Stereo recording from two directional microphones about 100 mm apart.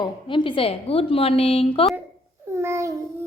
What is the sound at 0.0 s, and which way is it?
A woman's voice, 55° left (ahead or behind).